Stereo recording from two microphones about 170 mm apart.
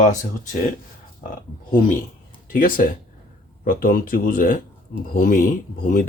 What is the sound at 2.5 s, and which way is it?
Speech, 50° left (ahead or behind).